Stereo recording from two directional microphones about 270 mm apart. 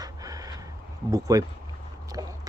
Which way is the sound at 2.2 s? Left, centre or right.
Centre.